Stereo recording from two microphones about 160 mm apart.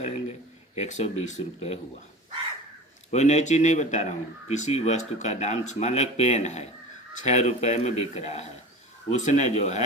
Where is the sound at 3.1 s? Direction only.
45° left (ahead or behind).